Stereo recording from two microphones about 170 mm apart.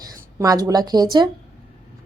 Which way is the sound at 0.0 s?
20° right (ahead or behind).